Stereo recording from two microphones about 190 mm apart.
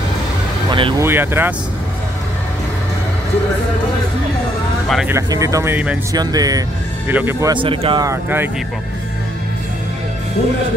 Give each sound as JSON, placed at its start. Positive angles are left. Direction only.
{"t": 0.7, "sound": "vehicle", "side_deg": -30}
{"t": 0.9, "sound": "speech", "side_deg": -10}
{"t": 4.8, "sound": "speech", "side_deg": 0}
{"t": 5.1, "sound": "speech", "side_deg": -15}